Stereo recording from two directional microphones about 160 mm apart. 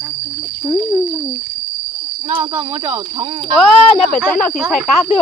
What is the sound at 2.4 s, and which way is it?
Speech, 15° right (ahead or behind).